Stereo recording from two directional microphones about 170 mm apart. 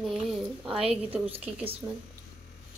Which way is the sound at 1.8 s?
15° right (ahead or behind).